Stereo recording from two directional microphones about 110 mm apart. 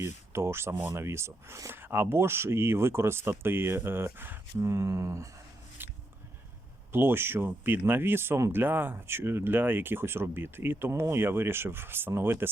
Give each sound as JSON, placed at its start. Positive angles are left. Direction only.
{"t": 0.0, "sound": "speech", "side_deg": -25}
{"t": 5.8, "sound": "a sound", "side_deg": -20}
{"t": 6.9, "sound": "speech", "side_deg": -20}